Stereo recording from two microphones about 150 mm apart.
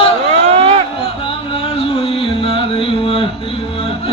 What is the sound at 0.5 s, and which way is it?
Speech, 45° right (ahead or behind).